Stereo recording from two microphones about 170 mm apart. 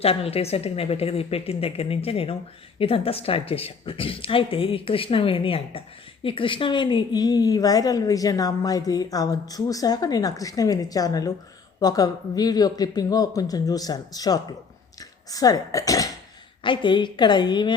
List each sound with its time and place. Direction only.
0.0 s a woman's voice: 35° left (ahead or behind)